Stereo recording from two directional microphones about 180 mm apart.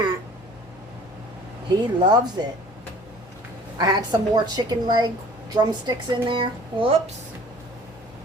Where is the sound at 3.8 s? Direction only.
25° right (ahead or behind).